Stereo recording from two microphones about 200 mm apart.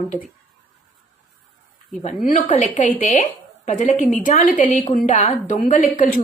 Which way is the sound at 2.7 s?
40° left (ahead or behind).